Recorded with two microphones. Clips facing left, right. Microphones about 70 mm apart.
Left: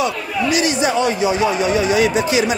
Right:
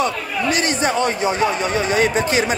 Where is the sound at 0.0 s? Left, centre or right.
Right.